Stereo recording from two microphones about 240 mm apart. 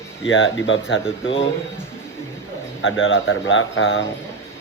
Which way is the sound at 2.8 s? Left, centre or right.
Left.